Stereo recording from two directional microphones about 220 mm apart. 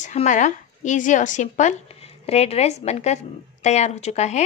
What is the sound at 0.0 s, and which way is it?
A woman's voice, 30° left (ahead or behind).